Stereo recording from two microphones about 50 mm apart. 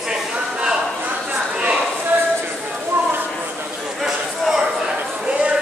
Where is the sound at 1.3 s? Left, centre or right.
Right.